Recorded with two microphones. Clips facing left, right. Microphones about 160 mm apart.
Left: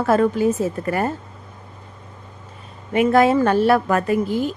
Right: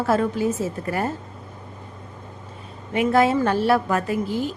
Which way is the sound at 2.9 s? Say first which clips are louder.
Left 3 dB; 55° left (ahead or behind).